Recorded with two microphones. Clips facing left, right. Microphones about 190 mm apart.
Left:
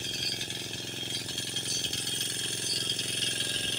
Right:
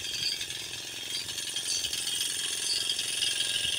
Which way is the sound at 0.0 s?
65° left (ahead or behind).